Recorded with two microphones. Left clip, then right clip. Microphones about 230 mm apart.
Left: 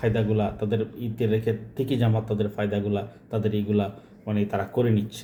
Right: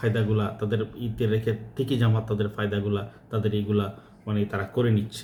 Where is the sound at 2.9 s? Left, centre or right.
Centre.